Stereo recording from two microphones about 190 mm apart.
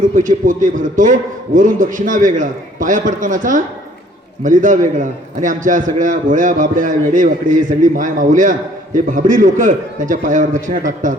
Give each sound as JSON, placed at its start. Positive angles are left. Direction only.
{"t": 0.2, "sound": "a man's voice", "side_deg": -45}